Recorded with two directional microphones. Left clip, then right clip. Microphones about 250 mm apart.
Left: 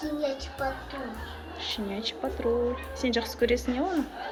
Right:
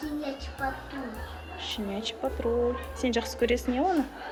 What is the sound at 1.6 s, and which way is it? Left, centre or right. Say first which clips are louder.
Speech: left 1 dB; centre.